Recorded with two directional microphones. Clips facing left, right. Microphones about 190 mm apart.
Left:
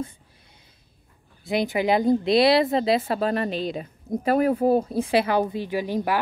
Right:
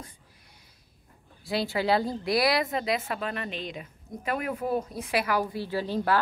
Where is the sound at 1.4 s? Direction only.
20° left (ahead or behind).